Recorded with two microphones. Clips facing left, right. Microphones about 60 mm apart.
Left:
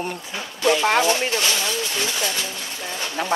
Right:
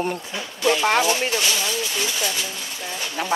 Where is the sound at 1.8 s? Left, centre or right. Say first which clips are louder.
Even; left.